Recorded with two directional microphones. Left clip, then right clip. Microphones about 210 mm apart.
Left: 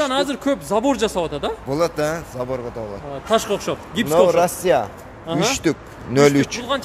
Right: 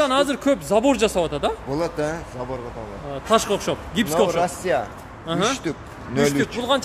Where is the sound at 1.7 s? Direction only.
40° left (ahead or behind).